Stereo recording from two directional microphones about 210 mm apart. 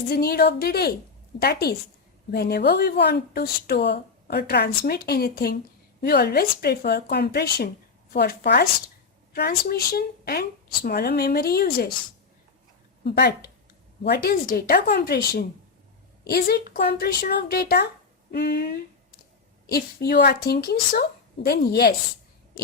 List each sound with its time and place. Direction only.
0.1 s speech: 45° left (ahead or behind)
13.1 s speech: 50° left (ahead or behind)